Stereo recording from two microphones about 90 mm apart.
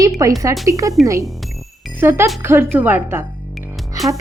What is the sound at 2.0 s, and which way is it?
Speech, 25° right (ahead or behind).